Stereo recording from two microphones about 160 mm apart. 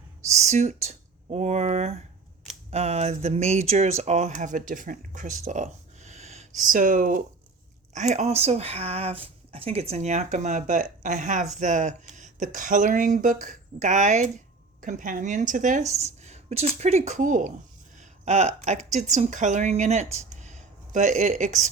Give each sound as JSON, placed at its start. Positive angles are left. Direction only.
{"t": 0.3, "sound": "speech", "side_deg": -45}
{"t": 7.9, "sound": "speech", "side_deg": -45}
{"t": 16.0, "sound": "speech", "side_deg": -45}